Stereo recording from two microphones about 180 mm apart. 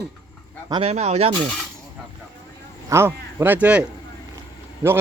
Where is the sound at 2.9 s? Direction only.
15° right (ahead or behind).